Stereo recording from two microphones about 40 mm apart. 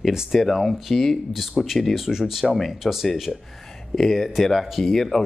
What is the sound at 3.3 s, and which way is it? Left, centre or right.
Speech, centre.